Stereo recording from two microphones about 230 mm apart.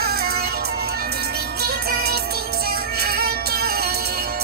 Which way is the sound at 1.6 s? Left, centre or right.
Right.